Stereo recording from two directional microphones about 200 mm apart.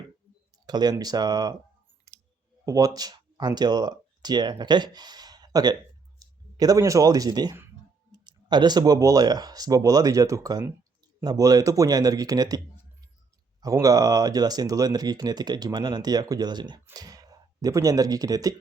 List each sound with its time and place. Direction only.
0.7 s speech: 20° right (ahead or behind)
2.6 s speech: 15° right (ahead or behind)